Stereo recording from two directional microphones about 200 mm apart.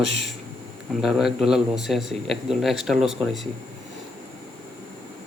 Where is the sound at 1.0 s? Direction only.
Centre (ahead or behind).